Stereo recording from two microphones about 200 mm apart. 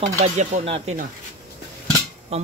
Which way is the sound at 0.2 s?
35° right (ahead or behind).